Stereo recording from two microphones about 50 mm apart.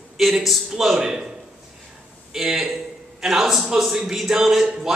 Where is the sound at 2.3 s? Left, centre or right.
Centre.